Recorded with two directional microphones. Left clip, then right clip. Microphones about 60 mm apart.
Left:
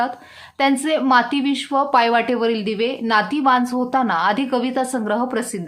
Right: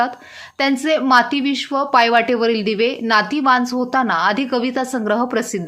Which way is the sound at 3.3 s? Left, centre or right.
Right.